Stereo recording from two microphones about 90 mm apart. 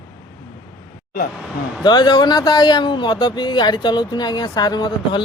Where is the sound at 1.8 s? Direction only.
55° left (ahead or behind).